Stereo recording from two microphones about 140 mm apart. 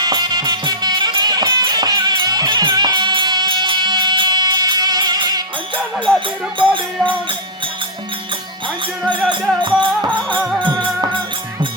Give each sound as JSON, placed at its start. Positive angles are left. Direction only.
{"t": 0.0, "sound": "music", "side_deg": -30}
{"t": 9.3, "sound": "music", "side_deg": -35}
{"t": 10.3, "sound": "music", "side_deg": -5}
{"t": 10.6, "sound": "music", "side_deg": -35}